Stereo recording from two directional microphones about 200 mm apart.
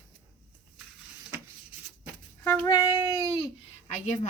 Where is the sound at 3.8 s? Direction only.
35° left (ahead or behind).